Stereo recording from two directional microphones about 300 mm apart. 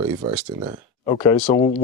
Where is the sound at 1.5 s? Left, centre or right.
Centre.